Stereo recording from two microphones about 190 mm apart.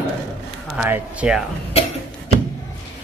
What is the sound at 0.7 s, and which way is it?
Speech, 10° right (ahead or behind).